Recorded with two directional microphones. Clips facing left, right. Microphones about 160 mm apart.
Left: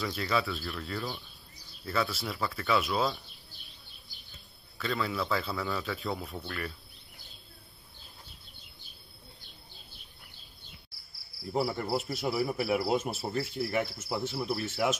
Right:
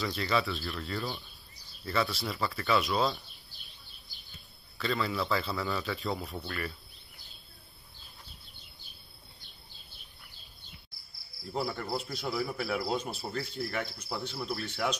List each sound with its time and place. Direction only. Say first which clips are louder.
0.0 s a man's voice: even; centre (ahead or behind)
4.7 s a man's voice: right 1 dB; centre (ahead or behind)
11.8 s a man's voice: left 4 dB; 5° left (ahead or behind)
12.4 s cricket: left 3 dB; 20° left (ahead or behind)
12.9 s speech: left 4 dB; 20° left (ahead or behind)
13.2 s cricket: left 3 dB; 5° left (ahead or behind)
14.0 s a man's voice: left 4 dB; 5° left (ahead or behind)